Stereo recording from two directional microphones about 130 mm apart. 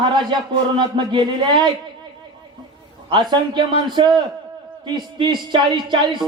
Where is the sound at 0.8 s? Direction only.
35° right (ahead or behind).